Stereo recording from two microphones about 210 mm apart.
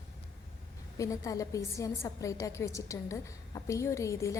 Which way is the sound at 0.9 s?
15° left (ahead or behind).